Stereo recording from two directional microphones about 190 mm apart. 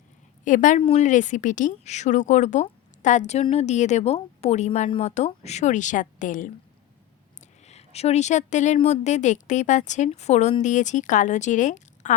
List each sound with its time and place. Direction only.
0.4 s a woman's voice: 40° left (ahead or behind)
7.7 s a woman's voice: 35° left (ahead or behind)